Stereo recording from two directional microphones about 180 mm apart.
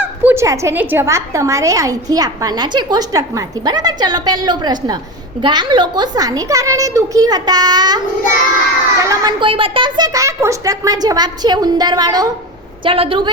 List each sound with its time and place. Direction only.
0.0 s a woman's voice: 15° right (ahead or behind); by 13.3 s 30° right (ahead or behind)